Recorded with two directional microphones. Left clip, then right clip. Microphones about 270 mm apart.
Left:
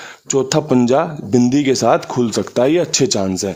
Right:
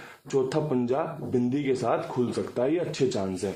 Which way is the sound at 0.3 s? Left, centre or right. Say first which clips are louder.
Left 10 dB; left.